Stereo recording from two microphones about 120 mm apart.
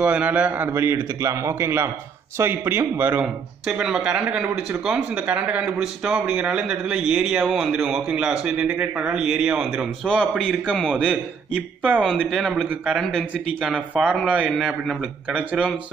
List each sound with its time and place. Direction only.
0.0 s a man's voice: 10° right (ahead or behind)
10.0 s a man's voice: 10° left (ahead or behind)
11.5 s a man's voice: 10° right (ahead or behind)